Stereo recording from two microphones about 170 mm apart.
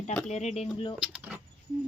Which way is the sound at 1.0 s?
10° right (ahead or behind).